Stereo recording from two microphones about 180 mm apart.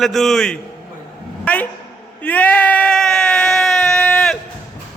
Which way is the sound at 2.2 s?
10° left (ahead or behind).